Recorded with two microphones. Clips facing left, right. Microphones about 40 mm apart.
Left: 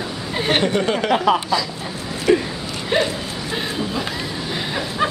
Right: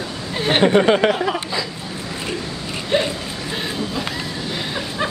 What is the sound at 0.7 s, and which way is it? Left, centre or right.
Speech, right.